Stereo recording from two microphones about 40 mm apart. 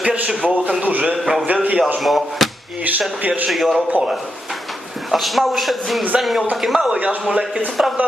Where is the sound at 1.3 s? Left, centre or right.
Right.